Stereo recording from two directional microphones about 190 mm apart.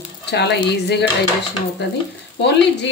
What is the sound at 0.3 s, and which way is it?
Speech, 65° left (ahead or behind).